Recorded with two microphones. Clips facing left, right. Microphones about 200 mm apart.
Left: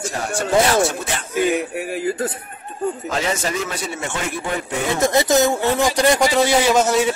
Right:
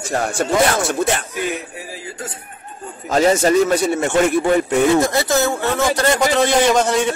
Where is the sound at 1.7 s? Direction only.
65° left (ahead or behind).